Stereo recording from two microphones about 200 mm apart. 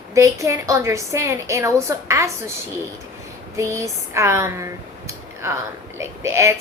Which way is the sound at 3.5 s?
15° right (ahead or behind).